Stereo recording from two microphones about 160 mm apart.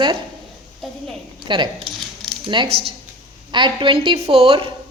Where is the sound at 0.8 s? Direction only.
Centre (ahead or behind).